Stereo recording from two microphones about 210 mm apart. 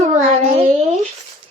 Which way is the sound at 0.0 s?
35° right (ahead or behind).